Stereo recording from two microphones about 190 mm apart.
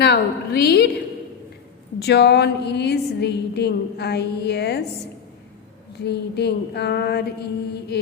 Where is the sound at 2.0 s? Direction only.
60° left (ahead or behind).